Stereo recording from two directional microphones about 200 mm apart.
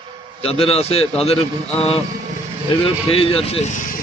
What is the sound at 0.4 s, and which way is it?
Speech, 30° left (ahead or behind).